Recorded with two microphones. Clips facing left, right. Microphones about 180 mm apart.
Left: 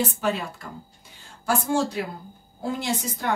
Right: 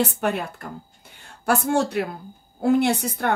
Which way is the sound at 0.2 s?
60° right (ahead or behind).